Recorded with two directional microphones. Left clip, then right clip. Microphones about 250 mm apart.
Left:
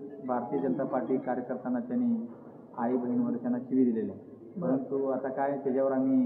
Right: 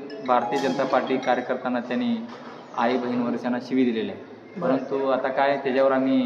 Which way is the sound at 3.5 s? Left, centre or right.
Centre.